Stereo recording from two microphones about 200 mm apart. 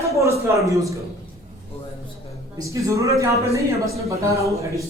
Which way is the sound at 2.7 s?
15° right (ahead or behind).